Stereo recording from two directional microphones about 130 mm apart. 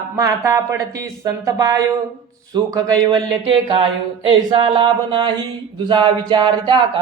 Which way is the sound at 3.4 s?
45° right (ahead or behind).